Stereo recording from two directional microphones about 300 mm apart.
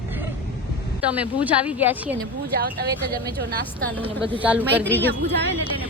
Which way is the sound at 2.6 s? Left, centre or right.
Right.